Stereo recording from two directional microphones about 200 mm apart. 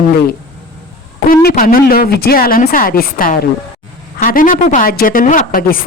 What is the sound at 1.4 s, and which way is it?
Speech, 45° left (ahead or behind).